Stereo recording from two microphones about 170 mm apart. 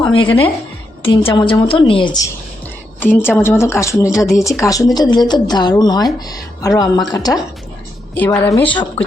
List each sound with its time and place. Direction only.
0.1 s a woman's voice: 30° left (ahead or behind)
3.0 s a woman's voice: 10° left (ahead or behind)
8.1 s speech: 10° left (ahead or behind)
8.6 s a woman's voice: 30° left (ahead or behind)